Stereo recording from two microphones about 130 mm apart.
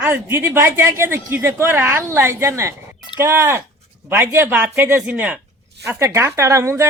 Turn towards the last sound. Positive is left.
turn(degrees=-20)  # may be behind; listen again after turning